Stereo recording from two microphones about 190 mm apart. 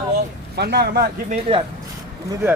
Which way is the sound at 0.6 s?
60° right (ahead or behind).